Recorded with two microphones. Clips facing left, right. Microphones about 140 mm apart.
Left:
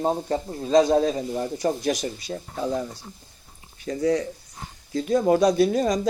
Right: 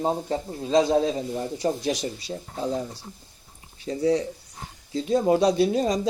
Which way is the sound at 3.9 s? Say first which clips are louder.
Even; 25° right (ahead or behind).